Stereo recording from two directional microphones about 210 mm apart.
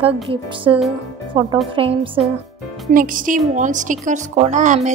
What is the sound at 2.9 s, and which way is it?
A woman's voice, 40° right (ahead or behind).